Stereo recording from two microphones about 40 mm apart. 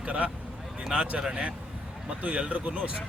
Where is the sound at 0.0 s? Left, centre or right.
Right.